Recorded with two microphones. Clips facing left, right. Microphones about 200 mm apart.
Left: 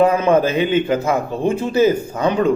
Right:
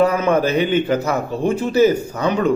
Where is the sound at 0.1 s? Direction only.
25° left (ahead or behind).